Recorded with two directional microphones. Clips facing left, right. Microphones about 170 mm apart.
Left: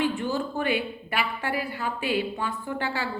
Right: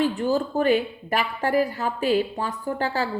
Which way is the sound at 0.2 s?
40° right (ahead or behind).